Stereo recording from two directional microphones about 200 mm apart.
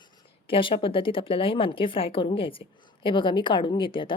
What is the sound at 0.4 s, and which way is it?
A woman's voice, 25° left (ahead or behind).